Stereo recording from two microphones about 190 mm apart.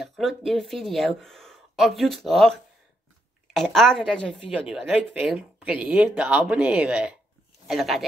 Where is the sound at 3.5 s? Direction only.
Centre (ahead or behind).